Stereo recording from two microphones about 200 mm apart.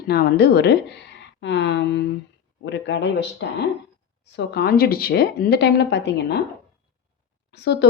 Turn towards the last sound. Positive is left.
turn(degrees=60)  # may be behind; listen again after turning